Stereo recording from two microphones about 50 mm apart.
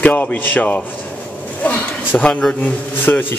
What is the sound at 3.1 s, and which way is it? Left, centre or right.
Speech, left.